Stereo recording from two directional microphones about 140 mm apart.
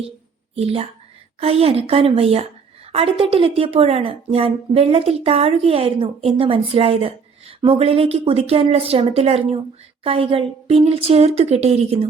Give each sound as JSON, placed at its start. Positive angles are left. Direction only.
{"t": 0.5, "sound": "a woman's voice", "side_deg": -45}